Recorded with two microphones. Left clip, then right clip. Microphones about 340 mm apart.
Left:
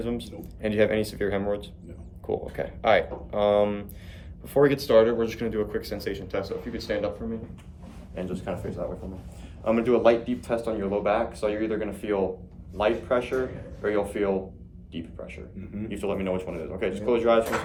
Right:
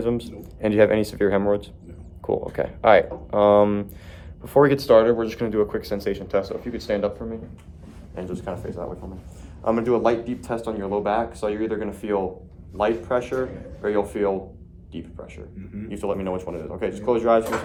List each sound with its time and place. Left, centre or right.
0.0 s speech: right
9.6 s speech: centre